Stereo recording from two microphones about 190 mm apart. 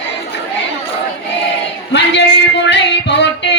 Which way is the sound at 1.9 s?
65° left (ahead or behind).